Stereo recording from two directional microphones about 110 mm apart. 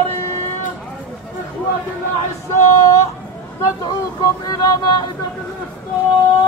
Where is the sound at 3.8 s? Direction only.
35° left (ahead or behind).